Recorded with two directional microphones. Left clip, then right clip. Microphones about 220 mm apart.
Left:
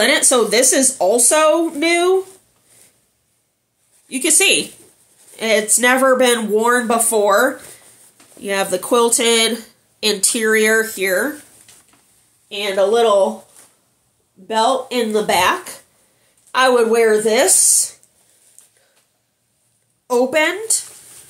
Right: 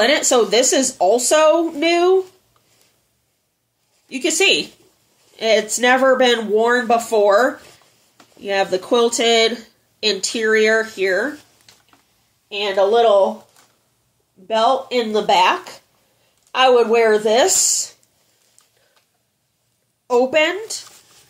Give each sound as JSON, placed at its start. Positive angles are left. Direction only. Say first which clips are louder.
{"t": 0.0, "sound": "speech", "louder": "even", "side_deg": 15}
{"t": 4.1, "sound": "speech", "louder": "left 1 dB", "side_deg": 15}
{"t": 12.6, "sound": "speech", "louder": "even", "side_deg": 20}
{"t": 14.5, "sound": "speech", "louder": "even", "side_deg": 20}
{"t": 20.1, "sound": "speech", "louder": "even", "side_deg": 15}